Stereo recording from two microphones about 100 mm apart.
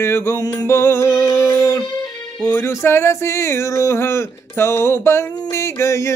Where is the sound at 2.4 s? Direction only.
25° left (ahead or behind).